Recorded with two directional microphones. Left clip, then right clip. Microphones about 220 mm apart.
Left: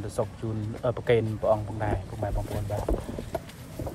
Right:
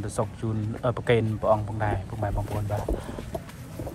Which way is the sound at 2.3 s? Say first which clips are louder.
Right 1 dB; 30° right (ahead or behind).